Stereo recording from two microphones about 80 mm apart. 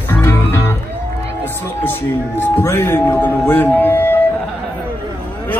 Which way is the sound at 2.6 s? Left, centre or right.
Left.